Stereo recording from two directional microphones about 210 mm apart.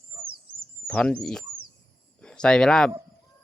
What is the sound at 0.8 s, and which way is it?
Speech, 5° left (ahead or behind).